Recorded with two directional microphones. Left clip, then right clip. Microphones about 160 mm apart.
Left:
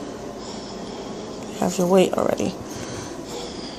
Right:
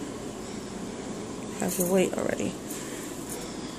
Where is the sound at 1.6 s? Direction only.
20° left (ahead or behind).